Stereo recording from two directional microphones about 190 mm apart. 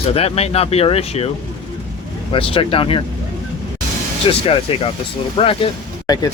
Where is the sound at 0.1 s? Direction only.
30° left (ahead or behind).